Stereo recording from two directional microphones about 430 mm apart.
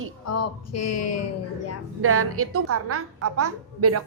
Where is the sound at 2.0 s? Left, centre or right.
Right.